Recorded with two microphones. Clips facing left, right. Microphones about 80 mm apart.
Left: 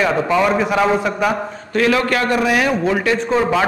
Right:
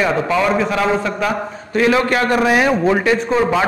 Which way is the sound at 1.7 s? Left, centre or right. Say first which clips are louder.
Right 1 dB; centre.